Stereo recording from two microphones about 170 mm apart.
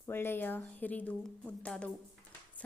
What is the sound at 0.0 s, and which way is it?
A woman's voice, 15° left (ahead or behind).